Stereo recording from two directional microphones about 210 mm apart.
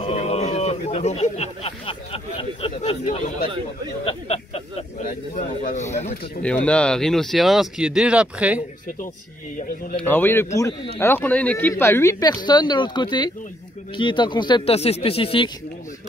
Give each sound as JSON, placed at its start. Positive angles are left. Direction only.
{"t": 0.0, "sound": "speech", "side_deg": 30}
{"t": 4.9, "sound": "speech", "side_deg": 40}
{"t": 6.4, "sound": "speech", "side_deg": 5}
{"t": 10.0, "sound": "speech", "side_deg": 10}